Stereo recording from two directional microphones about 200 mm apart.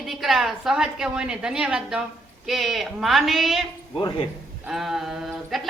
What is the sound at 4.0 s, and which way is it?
Speech, 20° left (ahead or behind).